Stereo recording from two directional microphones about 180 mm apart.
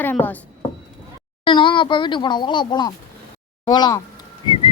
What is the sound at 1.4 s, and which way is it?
Speech, 25° left (ahead or behind).